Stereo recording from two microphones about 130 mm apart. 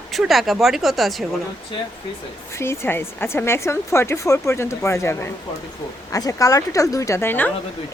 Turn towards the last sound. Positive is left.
turn(degrees=15)  # may be behind; listen again after turning